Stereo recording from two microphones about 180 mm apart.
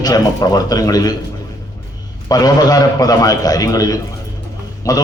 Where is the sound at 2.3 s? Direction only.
20° left (ahead or behind).